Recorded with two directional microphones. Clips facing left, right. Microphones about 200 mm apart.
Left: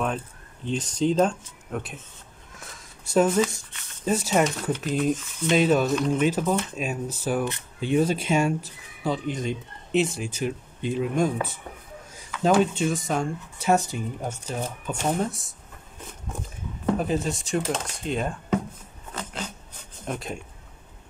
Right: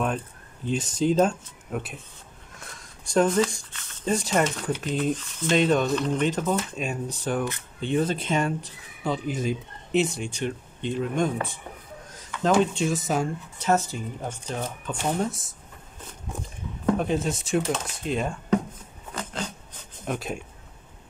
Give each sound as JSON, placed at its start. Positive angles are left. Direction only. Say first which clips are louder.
{"t": 0.7, "sound": "speech", "louder": "even", "side_deg": -5}
{"t": 9.0, "sound": "speech", "louder": "even", "side_deg": 0}
{"t": 13.6, "sound": "speech", "louder": "left 1 dB", "side_deg": 10}
{"t": 16.8, "sound": "speech", "louder": "right 1 dB", "side_deg": 0}
{"t": 20.1, "sound": "speech", "louder": "right 2 dB", "side_deg": 0}